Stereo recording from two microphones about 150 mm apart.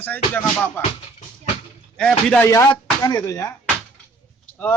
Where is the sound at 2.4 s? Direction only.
20° left (ahead or behind).